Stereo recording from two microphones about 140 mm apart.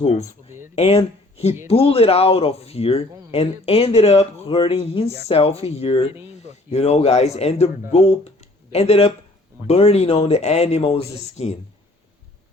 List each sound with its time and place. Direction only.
0.0 s speech: 50° left (ahead or behind)